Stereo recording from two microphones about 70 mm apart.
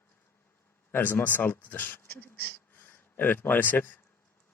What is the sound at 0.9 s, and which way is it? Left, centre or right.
Speech, left.